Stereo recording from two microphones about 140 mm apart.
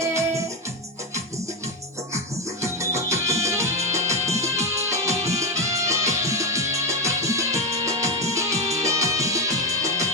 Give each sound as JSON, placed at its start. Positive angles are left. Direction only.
{"t": 0.0, "sound": "music", "side_deg": -20}
{"t": 2.1, "sound": "music", "side_deg": -20}